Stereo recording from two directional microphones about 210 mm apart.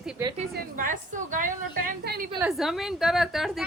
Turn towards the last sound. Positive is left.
turn(degrees=0)  # may be behind; listen again after turning